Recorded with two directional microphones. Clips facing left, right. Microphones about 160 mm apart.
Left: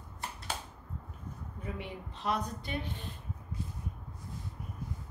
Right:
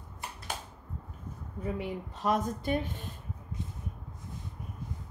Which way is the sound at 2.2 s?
45° right (ahead or behind).